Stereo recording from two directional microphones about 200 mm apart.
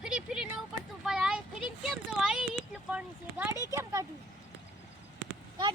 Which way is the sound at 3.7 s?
15° right (ahead or behind).